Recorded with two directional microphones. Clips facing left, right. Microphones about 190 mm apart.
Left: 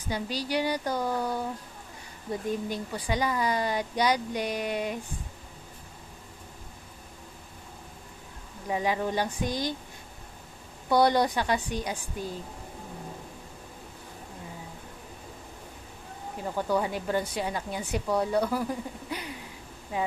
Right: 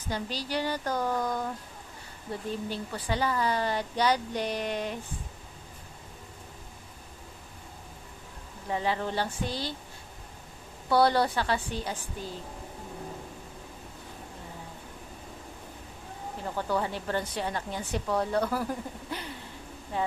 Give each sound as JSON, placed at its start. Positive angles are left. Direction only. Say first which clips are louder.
{"t": 0.0, "sound": "a woman's voice", "louder": "left 2 dB", "side_deg": 10}
{"t": 8.7, "sound": "a woman's voice", "louder": "left 2 dB", "side_deg": 15}
{"t": 10.8, "sound": "a woman's voice", "louder": "left 1 dB", "side_deg": 15}
{"t": 16.6, "sound": "a woman's voice", "louder": "left 3 dB", "side_deg": 10}